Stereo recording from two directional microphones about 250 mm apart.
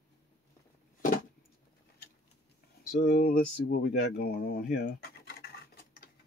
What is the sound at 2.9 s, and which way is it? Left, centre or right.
Speech, left.